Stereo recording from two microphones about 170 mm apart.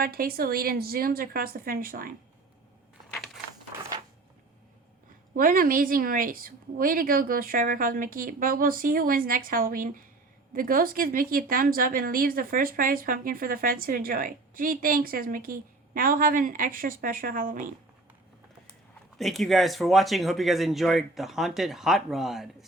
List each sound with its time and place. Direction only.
0.0 s a woman's voice: 60° right (ahead or behind)
5.4 s a woman's voice: 55° right (ahead or behind)
19.2 s speech: centre (ahead or behind)